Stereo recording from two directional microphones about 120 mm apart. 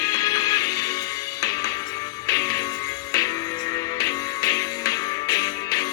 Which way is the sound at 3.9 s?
30° left (ahead or behind).